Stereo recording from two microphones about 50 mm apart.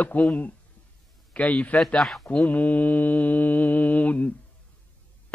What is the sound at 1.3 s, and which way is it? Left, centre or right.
Speech, left.